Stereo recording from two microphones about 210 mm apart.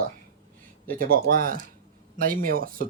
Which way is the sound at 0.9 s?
45° right (ahead or behind).